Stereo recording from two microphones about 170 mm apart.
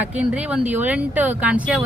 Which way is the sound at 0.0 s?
5° right (ahead or behind).